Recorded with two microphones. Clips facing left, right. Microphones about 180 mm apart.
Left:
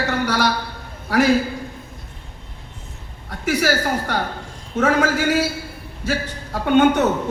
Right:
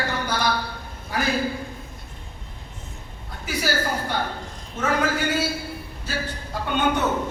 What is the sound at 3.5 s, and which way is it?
A man's voice, 90° left.